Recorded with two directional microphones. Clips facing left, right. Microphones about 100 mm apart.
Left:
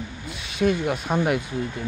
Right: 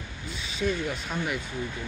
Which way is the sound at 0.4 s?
60° left (ahead or behind).